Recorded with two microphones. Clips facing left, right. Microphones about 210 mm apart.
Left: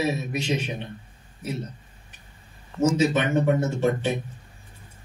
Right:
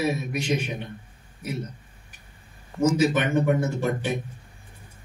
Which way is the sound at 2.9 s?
25° left (ahead or behind).